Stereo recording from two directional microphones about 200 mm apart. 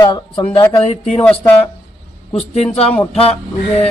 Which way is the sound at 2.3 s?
30° left (ahead or behind).